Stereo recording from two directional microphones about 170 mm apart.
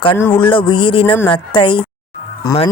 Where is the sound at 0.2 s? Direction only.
10° left (ahead or behind).